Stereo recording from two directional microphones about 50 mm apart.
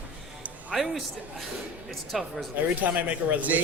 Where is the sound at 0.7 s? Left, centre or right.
Centre.